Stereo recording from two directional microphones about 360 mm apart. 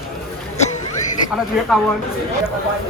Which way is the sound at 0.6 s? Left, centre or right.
Centre.